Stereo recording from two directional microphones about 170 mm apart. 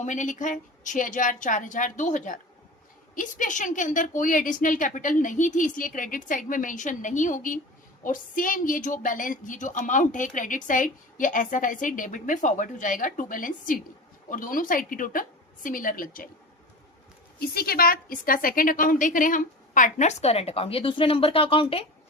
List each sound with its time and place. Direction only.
0.0 s a woman's voice: 45° left (ahead or behind)
17.4 s a woman's voice: 65° left (ahead or behind); by 21.8 s 30° left (ahead or behind)